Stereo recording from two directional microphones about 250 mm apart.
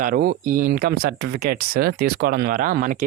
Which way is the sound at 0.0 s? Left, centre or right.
Right.